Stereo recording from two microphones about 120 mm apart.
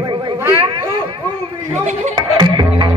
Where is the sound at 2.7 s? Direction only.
55° right (ahead or behind).